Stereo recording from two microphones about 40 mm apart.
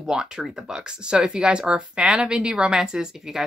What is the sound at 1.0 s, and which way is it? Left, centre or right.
A woman's voice, right.